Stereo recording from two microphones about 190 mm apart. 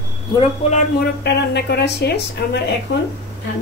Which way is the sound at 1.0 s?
65° left (ahead or behind).